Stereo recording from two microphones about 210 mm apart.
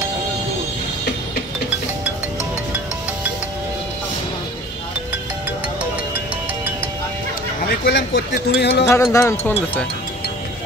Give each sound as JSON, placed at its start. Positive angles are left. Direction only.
{"t": 7.6, "sound": "speech", "side_deg": 50}
{"t": 8.8, "sound": "speech", "side_deg": 15}